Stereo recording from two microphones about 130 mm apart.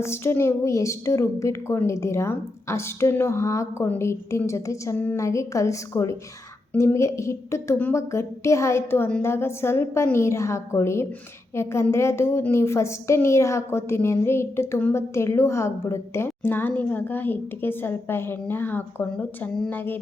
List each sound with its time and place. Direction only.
0.0 s a woman's voice: 20° left (ahead or behind)